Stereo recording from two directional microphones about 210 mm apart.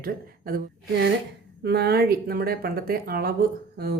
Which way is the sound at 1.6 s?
50° right (ahead or behind).